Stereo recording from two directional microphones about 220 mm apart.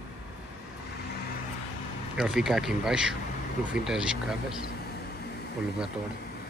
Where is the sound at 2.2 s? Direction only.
Centre (ahead or behind).